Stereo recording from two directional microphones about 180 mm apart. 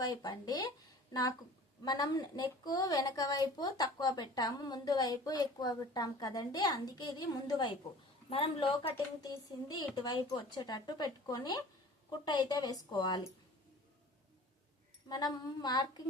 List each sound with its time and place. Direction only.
0.0 s a woman's voice: 20° left (ahead or behind)
1.8 s a woman's voice: 25° left (ahead or behind)
15.1 s a woman's voice: 20° left (ahead or behind)